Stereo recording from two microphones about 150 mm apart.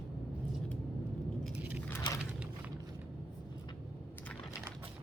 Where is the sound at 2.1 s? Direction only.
30° left (ahead or behind).